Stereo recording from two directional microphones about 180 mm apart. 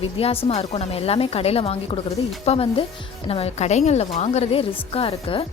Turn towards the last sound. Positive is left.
turn(degrees=30)  # may be behind; listen again after turning